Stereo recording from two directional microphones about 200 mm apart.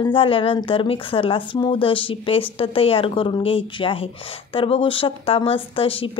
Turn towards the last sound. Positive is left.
turn(degrees=25)  # may be behind; listen again after turning